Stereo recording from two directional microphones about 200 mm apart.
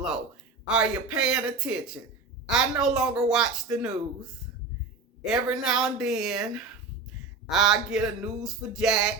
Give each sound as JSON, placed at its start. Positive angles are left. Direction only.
{"t": 0.7, "sound": "speech", "side_deg": -5}